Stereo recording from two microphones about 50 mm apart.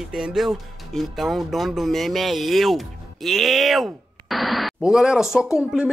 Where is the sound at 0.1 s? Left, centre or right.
Centre.